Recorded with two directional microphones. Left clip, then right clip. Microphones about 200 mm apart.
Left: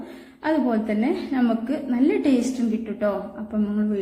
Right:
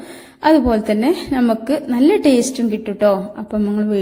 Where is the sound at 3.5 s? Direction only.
40° right (ahead or behind).